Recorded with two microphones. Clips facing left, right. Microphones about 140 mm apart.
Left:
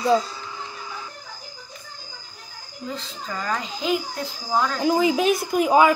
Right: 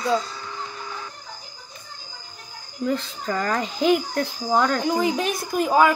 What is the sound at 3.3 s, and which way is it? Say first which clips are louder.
A woman's voice: right 4 dB; 65° right (ahead or behind).